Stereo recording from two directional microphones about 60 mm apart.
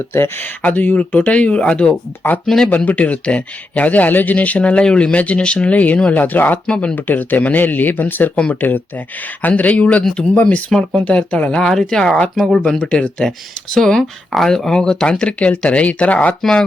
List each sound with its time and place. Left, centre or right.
0.1 s speech: left
0.6 s speech: left
2.2 s speech: left
6.9 s speech: left
10.4 s speech: centre
13.7 s speech: centre; by 16.3 s left
16.4 s speech: centre